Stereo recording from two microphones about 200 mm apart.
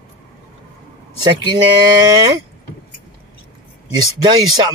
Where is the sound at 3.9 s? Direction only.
20° right (ahead or behind).